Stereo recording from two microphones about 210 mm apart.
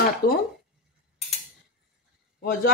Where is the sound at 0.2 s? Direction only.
45° left (ahead or behind).